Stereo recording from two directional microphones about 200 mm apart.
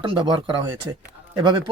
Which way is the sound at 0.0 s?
25° right (ahead or behind).